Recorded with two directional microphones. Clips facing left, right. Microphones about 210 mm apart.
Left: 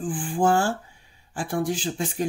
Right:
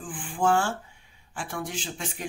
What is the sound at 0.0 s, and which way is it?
Speech, 35° left (ahead or behind).